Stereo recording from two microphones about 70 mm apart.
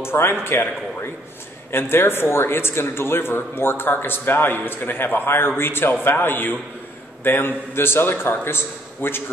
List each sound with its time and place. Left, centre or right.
0.0 s a man's voice: left
1.7 s a man's voice: left